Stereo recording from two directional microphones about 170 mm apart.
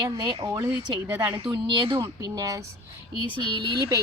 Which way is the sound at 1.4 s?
30° right (ahead or behind).